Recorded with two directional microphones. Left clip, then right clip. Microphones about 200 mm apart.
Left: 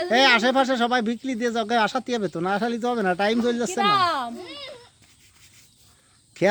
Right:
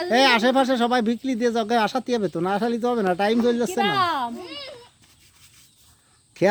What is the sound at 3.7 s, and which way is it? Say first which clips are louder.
Speech: left 1 dB; 35° left (ahead or behind).